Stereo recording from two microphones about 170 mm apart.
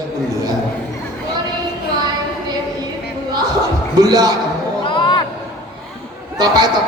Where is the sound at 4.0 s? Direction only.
20° right (ahead or behind).